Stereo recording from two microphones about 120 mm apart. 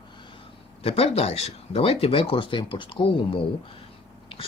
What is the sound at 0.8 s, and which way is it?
Speech, 55° left (ahead or behind).